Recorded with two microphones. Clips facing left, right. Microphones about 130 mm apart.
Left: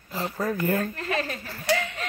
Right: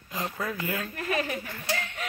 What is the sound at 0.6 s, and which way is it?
Speech, 45° left (ahead or behind).